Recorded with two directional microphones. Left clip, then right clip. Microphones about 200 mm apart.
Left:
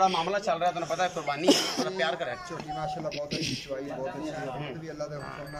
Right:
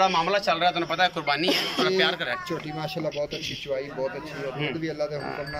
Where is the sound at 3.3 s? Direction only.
20° left (ahead or behind).